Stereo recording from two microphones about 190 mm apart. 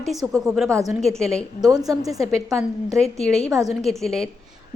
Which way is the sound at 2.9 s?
Centre (ahead or behind).